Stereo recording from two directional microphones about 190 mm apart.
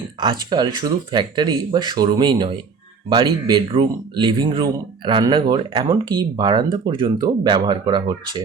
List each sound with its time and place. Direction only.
0.2 s speech: 25° right (ahead or behind)